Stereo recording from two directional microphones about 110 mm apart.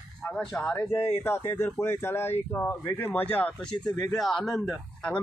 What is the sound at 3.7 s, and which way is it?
Speech, 40° left (ahead or behind).